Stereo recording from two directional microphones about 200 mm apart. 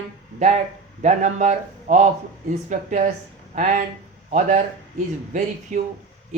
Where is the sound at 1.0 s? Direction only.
35° right (ahead or behind).